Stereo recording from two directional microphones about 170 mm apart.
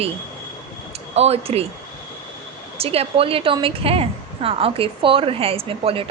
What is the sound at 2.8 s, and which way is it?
A woman's voice, 35° right (ahead or behind).